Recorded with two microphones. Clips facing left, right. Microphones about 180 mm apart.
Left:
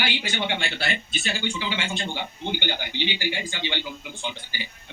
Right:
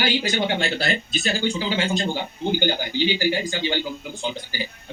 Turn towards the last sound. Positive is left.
turn(degrees=-40)  # may be behind; listen again after turning